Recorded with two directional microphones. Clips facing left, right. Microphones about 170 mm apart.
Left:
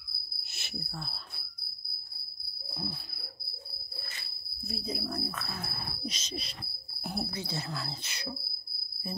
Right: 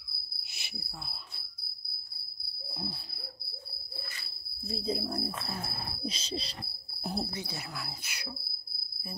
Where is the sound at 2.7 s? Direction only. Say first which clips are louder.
Left 1 dB; 30° right (ahead or behind).